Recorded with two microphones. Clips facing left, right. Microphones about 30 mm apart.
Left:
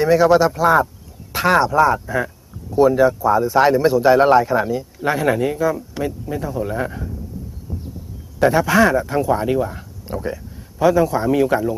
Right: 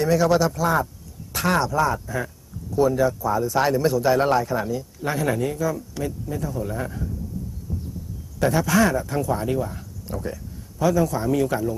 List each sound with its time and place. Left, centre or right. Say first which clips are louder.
0.0 s speech: left 6 dB; left
8.4 s speech: left 5 dB; left